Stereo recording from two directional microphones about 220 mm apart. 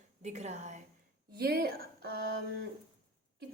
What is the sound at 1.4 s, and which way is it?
Speech, 45° right (ahead or behind).